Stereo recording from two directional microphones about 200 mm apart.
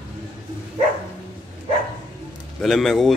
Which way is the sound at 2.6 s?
Centre (ahead or behind).